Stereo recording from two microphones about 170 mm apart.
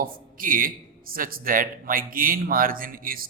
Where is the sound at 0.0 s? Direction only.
55° right (ahead or behind).